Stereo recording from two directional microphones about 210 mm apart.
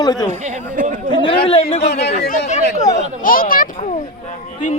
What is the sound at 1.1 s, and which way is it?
Speech, 25° left (ahead or behind).